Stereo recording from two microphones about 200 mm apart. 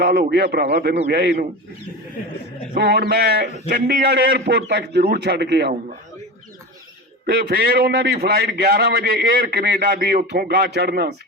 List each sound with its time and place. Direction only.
0.0 s a man's voice: 50° right (ahead or behind)
2.7 s a man's voice: 55° right (ahead or behind)
7.3 s a man's voice: 55° right (ahead or behind)